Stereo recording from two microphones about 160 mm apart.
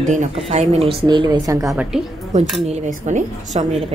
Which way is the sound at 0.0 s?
50° right (ahead or behind).